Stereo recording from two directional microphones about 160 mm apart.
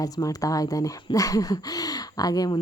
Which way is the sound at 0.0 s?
20° left (ahead or behind).